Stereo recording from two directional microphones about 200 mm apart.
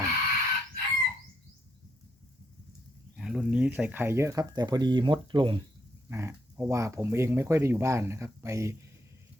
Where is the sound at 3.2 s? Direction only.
5° right (ahead or behind); by 5.6 s 25° right (ahead or behind).